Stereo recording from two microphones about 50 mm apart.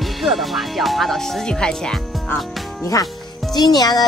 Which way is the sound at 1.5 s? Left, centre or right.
Centre.